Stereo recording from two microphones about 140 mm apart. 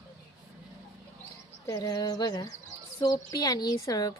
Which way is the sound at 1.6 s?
25° left (ahead or behind).